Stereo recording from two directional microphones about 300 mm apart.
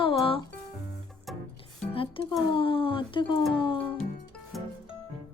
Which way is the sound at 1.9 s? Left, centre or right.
Centre.